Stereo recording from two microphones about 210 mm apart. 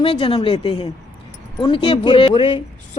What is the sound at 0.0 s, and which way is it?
A woman's voice, 25° left (ahead or behind).